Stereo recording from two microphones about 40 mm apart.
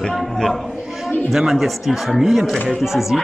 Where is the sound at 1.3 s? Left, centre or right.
Centre.